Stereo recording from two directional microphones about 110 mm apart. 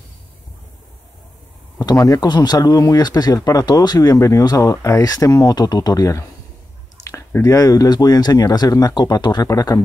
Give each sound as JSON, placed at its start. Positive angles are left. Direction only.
{"t": 1.8, "sound": "speech", "side_deg": 35}